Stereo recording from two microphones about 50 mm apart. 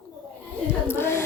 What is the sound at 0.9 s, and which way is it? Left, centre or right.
Female singing, left.